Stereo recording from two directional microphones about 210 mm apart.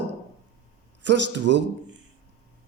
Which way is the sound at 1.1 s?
55° right (ahead or behind).